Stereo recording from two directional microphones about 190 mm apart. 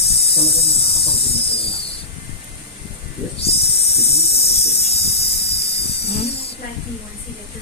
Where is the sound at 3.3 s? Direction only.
30° left (ahead or behind).